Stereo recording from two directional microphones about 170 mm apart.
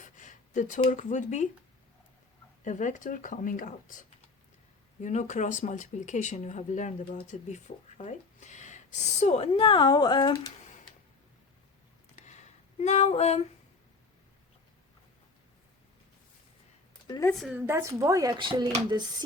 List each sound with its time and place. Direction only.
0.0 s a sound: 50° left (ahead or behind)
0.8 s speech: 45° left (ahead or behind)
2.6 s speech: 45° left (ahead or behind)
5.0 s speech: 45° left (ahead or behind); by 10.5 s 25° left (ahead or behind)
12.1 s a sound: 40° left (ahead or behind)
17.1 s a woman's voice: 20° left (ahead or behind)
17.4 s a woman's voice: 10° right (ahead or behind); by 18.7 s 25° right (ahead or behind)